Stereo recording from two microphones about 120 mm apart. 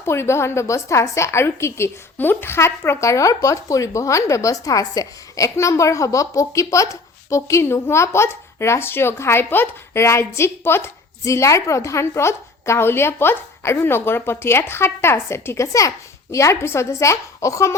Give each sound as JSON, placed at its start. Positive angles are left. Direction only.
{"t": 0.0, "sound": "a woman's voice", "side_deg": 20}